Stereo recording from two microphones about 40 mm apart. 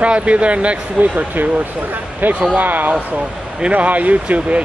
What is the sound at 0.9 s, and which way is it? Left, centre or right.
Speech, right.